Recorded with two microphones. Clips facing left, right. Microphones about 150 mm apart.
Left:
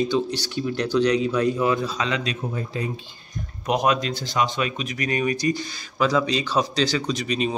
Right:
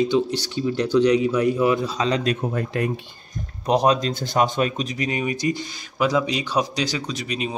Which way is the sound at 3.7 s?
35° right (ahead or behind).